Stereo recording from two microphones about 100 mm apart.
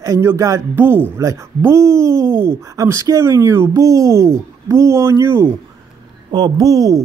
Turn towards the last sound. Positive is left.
turn(degrees=-40)  # may be behind; listen again after turning